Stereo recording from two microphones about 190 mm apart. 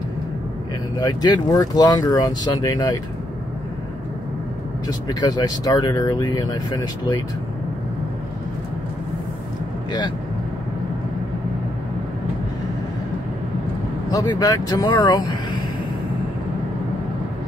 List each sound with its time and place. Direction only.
0.9 s speech: 20° left (ahead or behind)
4.8 s speech: 20° left (ahead or behind)
14.1 s speech: 20° left (ahead or behind)